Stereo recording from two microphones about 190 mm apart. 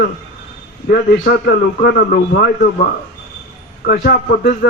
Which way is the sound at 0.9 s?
50° left (ahead or behind).